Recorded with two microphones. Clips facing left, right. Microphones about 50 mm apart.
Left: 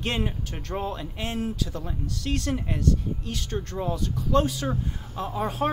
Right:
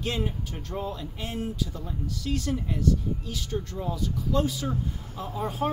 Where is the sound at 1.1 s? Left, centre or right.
Left.